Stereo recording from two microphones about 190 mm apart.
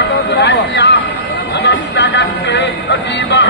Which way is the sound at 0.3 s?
65° left (ahead or behind).